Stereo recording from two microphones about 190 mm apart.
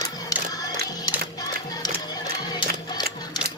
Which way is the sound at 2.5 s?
20° left (ahead or behind).